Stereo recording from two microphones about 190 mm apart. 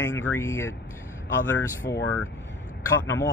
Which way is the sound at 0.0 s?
15° left (ahead or behind).